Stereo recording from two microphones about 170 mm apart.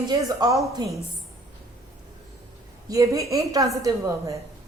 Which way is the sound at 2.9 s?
20° right (ahead or behind).